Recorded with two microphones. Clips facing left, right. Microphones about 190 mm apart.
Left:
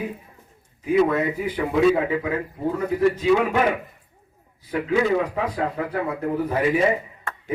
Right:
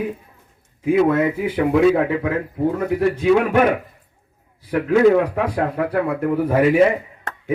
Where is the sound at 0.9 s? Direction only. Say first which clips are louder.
Right 3 dB; 85° right.